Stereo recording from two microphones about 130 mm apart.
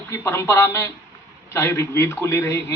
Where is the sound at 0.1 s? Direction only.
20° left (ahead or behind).